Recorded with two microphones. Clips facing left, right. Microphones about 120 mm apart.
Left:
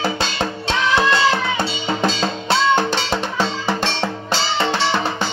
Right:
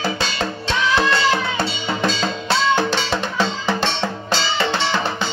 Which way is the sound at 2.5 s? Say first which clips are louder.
Left 1 dB; 15° left (ahead or behind).